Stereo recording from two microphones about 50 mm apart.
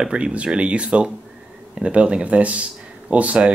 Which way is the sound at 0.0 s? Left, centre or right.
Centre.